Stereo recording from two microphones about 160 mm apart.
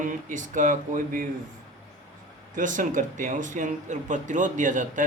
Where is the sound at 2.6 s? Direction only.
55° right (ahead or behind).